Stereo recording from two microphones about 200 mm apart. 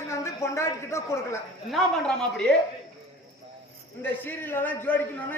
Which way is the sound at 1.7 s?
Centre (ahead or behind).